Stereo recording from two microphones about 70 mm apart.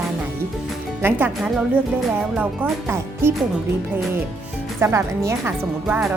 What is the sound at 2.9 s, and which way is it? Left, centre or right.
Speech, right.